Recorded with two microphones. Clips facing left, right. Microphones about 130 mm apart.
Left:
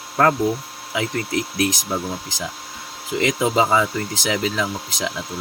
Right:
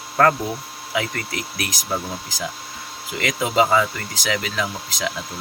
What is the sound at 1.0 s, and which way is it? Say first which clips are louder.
Speech: left 4 dB; 20° left (ahead or behind).